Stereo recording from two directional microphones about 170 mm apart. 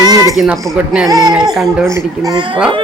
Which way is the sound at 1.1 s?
20° right (ahead or behind).